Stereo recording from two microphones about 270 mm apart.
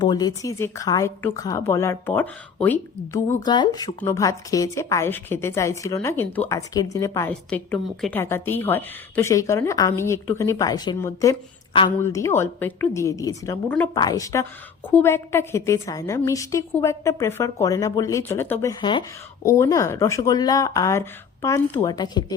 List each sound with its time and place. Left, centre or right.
0.0 s a woman's voice: centre